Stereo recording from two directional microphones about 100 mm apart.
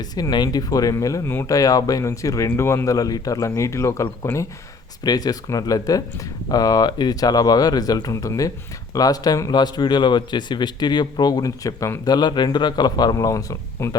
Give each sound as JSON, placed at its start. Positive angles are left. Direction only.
{"t": 0.0, "sound": "speech", "side_deg": 45}
{"t": 5.0, "sound": "speech", "side_deg": 40}